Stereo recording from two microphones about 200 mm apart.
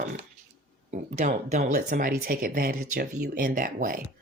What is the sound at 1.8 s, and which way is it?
Speech, 50° right (ahead or behind).